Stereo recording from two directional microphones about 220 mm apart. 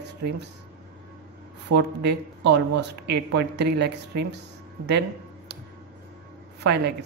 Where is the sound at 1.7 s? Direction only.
50° right (ahead or behind).